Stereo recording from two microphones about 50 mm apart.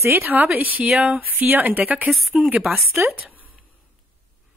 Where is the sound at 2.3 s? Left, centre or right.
Right.